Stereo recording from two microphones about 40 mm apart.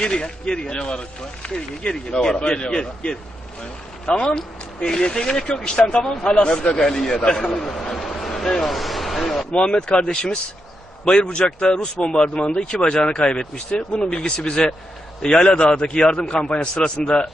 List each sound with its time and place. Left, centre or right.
0.0 s speech: left
4.1 s speech: centre
6.8 s speech: centre
7.3 s speech: left
7.6 s a sound: centre
9.2 s speech: centre
9.5 s speech: left